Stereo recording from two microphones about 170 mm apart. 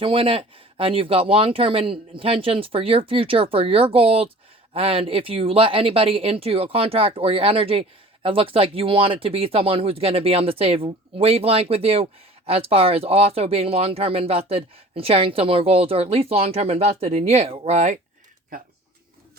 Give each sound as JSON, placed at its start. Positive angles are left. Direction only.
{"t": 0.0, "sound": "speech", "side_deg": -30}